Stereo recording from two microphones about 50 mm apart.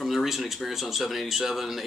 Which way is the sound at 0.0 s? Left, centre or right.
Centre.